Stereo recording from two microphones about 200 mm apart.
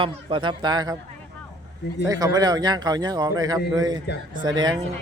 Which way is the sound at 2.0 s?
20° right (ahead or behind).